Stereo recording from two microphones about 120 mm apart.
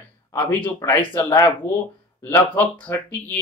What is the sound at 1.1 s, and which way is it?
Speech, 20° left (ahead or behind).